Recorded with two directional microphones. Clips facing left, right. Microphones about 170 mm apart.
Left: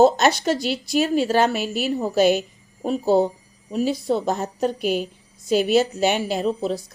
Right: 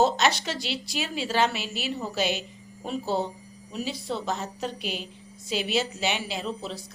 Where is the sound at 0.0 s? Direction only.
45° left (ahead or behind).